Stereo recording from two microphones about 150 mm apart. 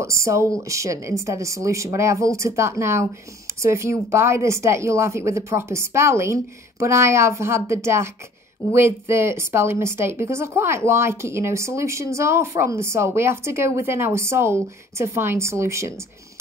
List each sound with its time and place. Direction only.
0.0 s a woman's voice: 20° right (ahead or behind)